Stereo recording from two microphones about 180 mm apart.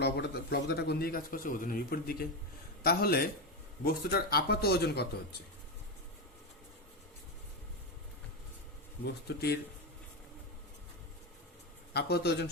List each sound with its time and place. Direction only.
0.0 s a man's voice: 65° left (ahead or behind)
9.2 s speech: 65° left (ahead or behind)
11.9 s speech: 65° left (ahead or behind)